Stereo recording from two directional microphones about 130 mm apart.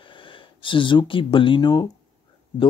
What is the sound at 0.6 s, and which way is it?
Speech, 40° left (ahead or behind).